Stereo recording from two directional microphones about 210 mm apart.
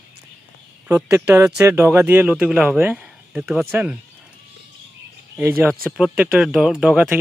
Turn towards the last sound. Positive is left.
turn(degrees=-5)  # may be behind; listen again after turning